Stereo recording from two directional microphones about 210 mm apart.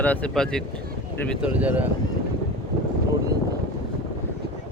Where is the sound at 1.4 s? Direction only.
5° right (ahead or behind).